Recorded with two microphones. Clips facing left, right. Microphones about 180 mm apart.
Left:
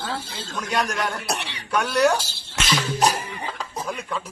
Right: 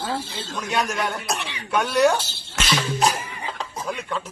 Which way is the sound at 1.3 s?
35° left (ahead or behind).